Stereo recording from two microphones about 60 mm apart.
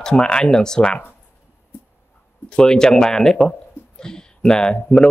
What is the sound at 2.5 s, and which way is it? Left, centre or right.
Speech, centre.